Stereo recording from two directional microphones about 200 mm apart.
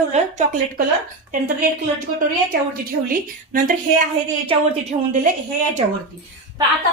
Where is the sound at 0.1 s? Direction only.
40° right (ahead or behind).